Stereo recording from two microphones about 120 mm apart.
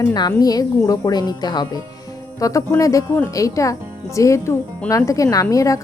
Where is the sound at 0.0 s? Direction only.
35° left (ahead or behind).